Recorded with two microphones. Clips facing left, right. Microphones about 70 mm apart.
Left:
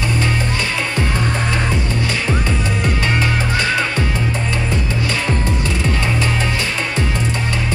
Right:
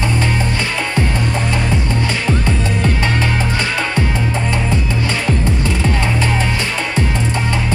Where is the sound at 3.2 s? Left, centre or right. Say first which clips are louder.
Even; right.